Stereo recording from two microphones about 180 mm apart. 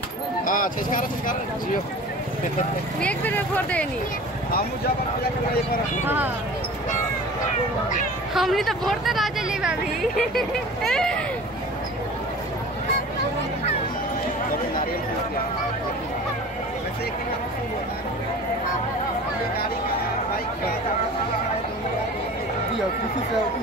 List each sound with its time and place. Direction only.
0.5 s speech: 50° left (ahead or behind)
3.0 s speech: 10° left (ahead or behind)
6.0 s speech: 10° right (ahead or behind)
8.4 s speech: centre (ahead or behind)